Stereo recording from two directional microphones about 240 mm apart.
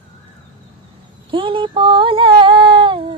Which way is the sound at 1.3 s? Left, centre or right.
Right.